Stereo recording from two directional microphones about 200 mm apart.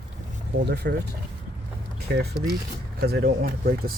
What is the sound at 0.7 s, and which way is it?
Speech, 60° right (ahead or behind).